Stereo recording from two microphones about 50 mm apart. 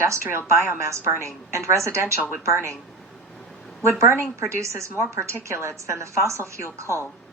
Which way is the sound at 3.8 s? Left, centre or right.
Right.